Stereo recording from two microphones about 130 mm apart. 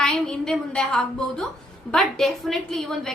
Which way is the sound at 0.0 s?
5° left (ahead or behind).